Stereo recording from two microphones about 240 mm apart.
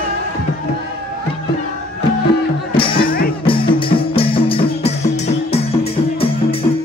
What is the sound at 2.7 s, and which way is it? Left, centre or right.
Music, left.